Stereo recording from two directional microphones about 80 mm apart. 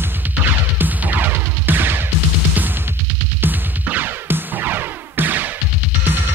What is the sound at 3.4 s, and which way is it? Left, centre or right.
Music, right.